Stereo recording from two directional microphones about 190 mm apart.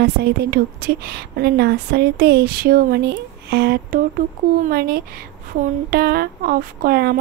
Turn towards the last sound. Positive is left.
turn(degrees=-55)  # may be behind; listen again after turning